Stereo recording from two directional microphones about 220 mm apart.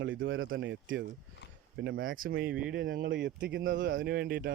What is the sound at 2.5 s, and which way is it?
Speech, 5° right (ahead or behind).